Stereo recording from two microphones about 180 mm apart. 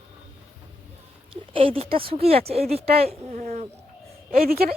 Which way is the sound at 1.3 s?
30° right (ahead or behind).